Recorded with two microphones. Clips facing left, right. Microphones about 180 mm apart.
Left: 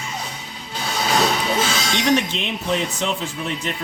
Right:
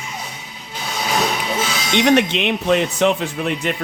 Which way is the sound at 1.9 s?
65° right (ahead or behind).